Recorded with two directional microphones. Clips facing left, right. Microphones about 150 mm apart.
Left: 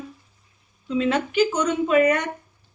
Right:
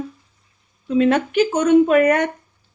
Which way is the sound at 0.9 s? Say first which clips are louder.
Right 6 dB; 55° right (ahead or behind).